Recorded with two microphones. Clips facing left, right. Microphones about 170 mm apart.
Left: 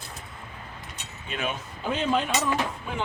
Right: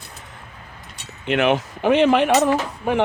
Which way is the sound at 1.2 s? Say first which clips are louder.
Right 13 dB; 75° right (ahead or behind).